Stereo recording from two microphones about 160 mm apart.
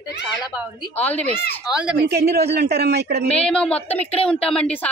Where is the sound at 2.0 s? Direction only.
90° right.